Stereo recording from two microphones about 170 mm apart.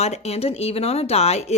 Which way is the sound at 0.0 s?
40° left (ahead or behind).